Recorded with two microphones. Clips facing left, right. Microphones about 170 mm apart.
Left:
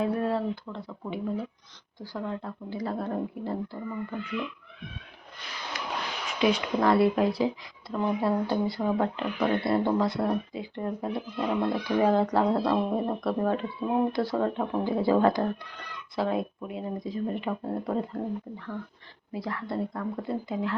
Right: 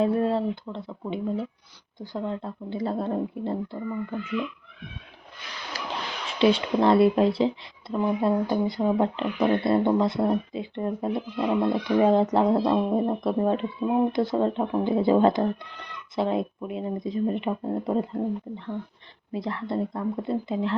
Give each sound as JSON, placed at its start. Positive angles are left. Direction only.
{"t": 0.0, "sound": "speech", "side_deg": -25}
{"t": 5.7, "sound": "a sound", "side_deg": -35}
{"t": 6.4, "sound": "speech", "side_deg": -30}